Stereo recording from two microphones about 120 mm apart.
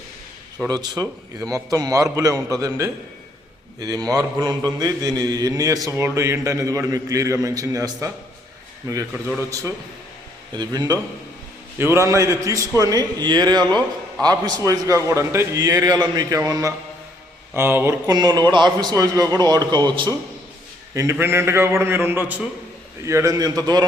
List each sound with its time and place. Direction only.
0.7 s mantra: 30° right (ahead or behind)
9.5 s mantra: 25° right (ahead or behind)
10.5 s a man's voice: 35° right (ahead or behind)
11.8 s mantra: 20° right (ahead or behind)
12.5 s a man's voice: 25° right (ahead or behind)
14.3 s mantra: 30° right (ahead or behind)
18.1 s a man's voice: 35° right (ahead or behind)
20.9 s mantra: 25° right (ahead or behind)
23.0 s a man's voice: 25° right (ahead or behind)